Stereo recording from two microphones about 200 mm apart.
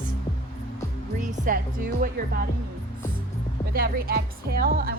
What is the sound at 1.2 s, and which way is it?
Speech, 40° right (ahead or behind).